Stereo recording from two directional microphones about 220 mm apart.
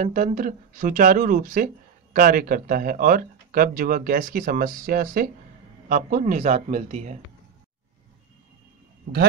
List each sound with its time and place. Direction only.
0.0 s speech: 35° right (ahead or behind)